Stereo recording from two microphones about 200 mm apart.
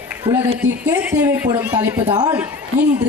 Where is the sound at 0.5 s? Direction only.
5° right (ahead or behind).